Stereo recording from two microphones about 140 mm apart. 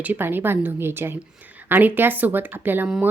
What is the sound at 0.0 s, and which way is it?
A woman's voice, 15° right (ahead or behind).